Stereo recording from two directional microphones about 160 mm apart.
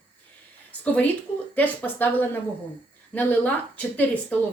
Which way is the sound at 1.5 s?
10° left (ahead or behind).